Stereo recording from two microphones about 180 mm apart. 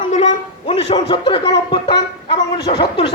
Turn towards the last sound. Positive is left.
turn(degrees=25)  # may be behind; listen again after turning